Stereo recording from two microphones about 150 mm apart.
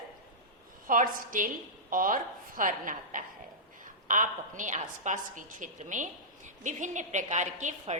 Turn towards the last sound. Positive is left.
turn(degrees=-55)  # may be behind; listen again after turning